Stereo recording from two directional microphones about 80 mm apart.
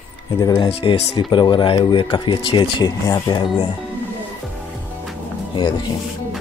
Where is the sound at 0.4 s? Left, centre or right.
Left.